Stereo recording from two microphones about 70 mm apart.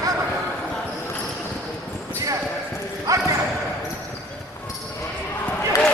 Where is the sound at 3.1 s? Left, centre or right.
Right.